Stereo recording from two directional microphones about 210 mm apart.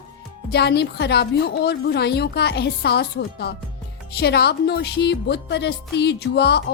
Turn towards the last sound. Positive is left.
turn(degrees=50)  # may be behind; listen again after turning